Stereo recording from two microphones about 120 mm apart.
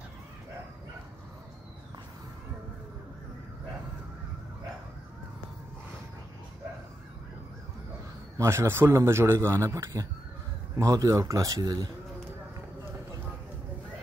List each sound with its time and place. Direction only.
8.4 s a man's voice: 20° right (ahead or behind)